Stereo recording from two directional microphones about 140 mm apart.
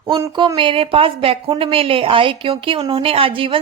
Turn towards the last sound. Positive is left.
turn(degrees=-40)  # may be behind; listen again after turning